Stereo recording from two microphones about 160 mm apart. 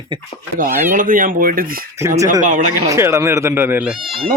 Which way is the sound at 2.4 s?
50° right (ahead or behind).